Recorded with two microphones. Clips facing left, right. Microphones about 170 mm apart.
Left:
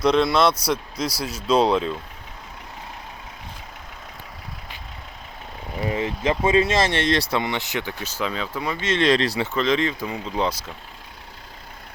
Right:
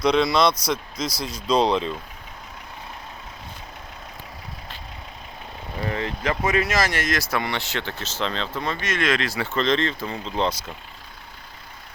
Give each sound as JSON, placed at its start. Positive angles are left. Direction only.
{"t": 0.0, "sound": "speech", "side_deg": 0}
{"t": 5.9, "sound": "speech", "side_deg": 15}
{"t": 6.4, "sound": "speech", "side_deg": 25}
{"t": 8.8, "sound": "speech", "side_deg": 30}
{"t": 9.6, "sound": "speech", "side_deg": 10}